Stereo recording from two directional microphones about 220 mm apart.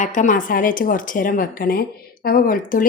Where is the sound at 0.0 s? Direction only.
35° left (ahead or behind).